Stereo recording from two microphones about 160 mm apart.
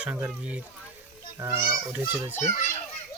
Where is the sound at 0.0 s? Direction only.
10° right (ahead or behind).